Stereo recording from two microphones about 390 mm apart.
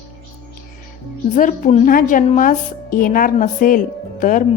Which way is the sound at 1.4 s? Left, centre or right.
Centre.